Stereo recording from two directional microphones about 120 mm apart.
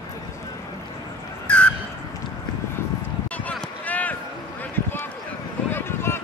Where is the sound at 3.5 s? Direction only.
10° left (ahead or behind).